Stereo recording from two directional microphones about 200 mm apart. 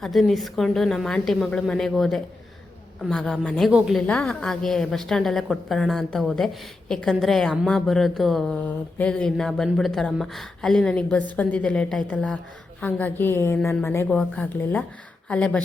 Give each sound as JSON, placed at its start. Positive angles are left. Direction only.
{"t": 0.0, "sound": "a woman's voice", "side_deg": 0}